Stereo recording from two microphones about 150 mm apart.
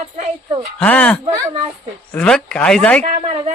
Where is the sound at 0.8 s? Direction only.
10° left (ahead or behind).